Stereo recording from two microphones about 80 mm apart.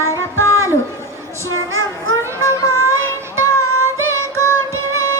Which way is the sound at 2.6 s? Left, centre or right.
Left.